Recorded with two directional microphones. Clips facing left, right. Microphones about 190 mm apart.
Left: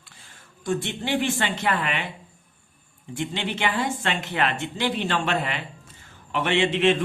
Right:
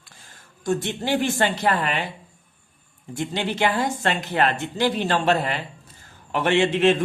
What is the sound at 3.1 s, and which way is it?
Speech, 40° right (ahead or behind).